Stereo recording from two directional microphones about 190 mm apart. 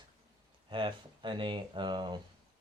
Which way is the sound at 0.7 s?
25° right (ahead or behind).